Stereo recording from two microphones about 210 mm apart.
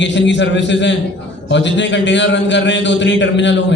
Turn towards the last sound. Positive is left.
turn(degrees=60)  # may be behind; listen again after turning